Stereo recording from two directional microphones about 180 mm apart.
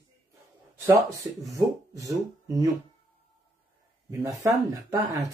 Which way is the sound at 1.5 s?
20° right (ahead or behind).